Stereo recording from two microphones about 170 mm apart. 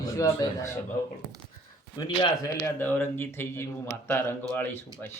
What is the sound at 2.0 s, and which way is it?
Speech, 15° left (ahead or behind).